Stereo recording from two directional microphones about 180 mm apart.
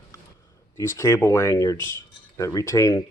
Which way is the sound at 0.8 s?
15° left (ahead or behind).